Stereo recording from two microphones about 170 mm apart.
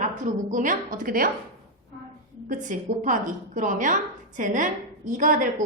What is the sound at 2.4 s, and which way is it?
A woman's voice, 50° right (ahead or behind).